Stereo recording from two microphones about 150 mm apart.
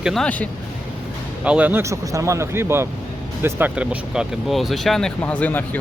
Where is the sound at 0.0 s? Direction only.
Centre (ahead or behind).